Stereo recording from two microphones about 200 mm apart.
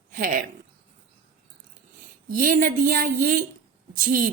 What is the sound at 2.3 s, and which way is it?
Speech, 45° right (ahead or behind).